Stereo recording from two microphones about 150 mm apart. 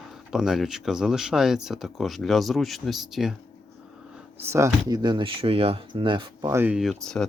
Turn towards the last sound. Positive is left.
turn(degrees=0)  # may be behind; listen again after turning